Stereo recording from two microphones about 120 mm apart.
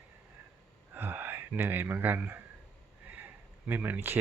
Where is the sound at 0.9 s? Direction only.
20° right (ahead or behind).